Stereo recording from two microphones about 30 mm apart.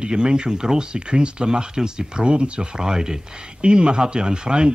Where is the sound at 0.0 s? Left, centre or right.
Right.